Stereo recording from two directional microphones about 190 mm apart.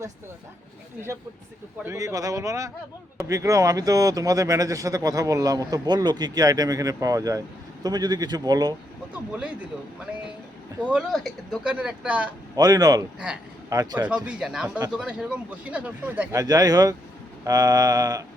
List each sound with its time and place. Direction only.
1.8 s speech: 15° right (ahead or behind)
7.9 s mantra: 20° right (ahead or behind)
10.1 s speech: 5° right (ahead or behind)
12.5 s mantra: 20° right (ahead or behind)
13.1 s speech: 5° right (ahead or behind)
13.7 s mantra: 20° right (ahead or behind)
14.3 s speech: centre (ahead or behind); by 16.9 s 20° right (ahead or behind)
17.4 s mantra: 20° right (ahead or behind)